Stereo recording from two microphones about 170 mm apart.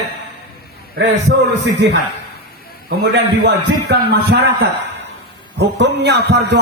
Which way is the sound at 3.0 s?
70° right (ahead or behind).